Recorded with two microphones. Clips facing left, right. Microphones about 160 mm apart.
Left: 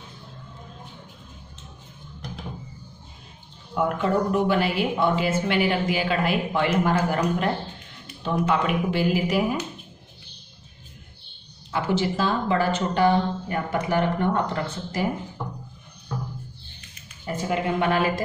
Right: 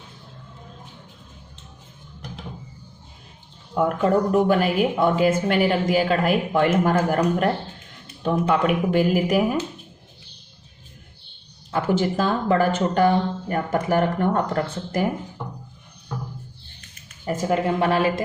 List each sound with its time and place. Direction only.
3.7 s speech: 40° right (ahead or behind)
8.2 s speech: 50° right (ahead or behind)
11.7 s speech: 50° right (ahead or behind)
17.3 s speech: 40° right (ahead or behind)